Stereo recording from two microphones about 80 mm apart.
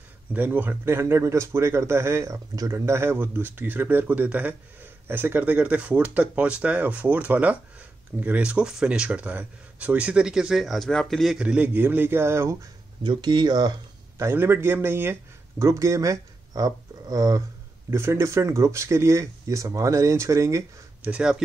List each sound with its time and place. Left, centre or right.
0.3 s speech: right; by 11.3 s centre
11.3 s speech: centre; by 12.5 s right
13.0 s speech: right
14.3 s speech: right
15.6 s speech: right
17.8 s speech: right
21.0 s speech: centre